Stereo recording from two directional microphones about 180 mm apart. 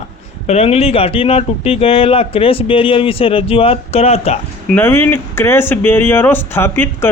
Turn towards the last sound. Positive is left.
turn(degrees=10)  # may be behind; listen again after turning